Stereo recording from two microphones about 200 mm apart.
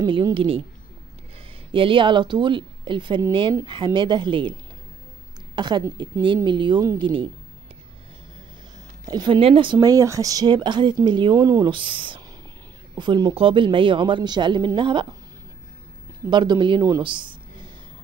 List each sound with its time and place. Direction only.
0.0 s speech: 25° right (ahead or behind)
1.7 s speech: 25° right (ahead or behind)
5.6 s speech: 20° right (ahead or behind)
9.0 s speech: 20° right (ahead or behind)
16.3 s speech: 25° right (ahead or behind)